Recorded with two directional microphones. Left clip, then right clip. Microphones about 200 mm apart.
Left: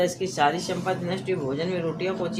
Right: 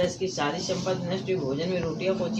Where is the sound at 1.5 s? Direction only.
40° left (ahead or behind).